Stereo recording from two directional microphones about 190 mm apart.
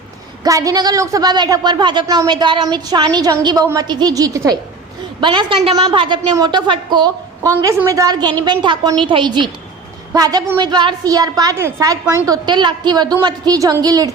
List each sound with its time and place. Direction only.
0.4 s a woman's voice: 15° right (ahead or behind)
7.5 s a woman's voice: 15° right (ahead or behind)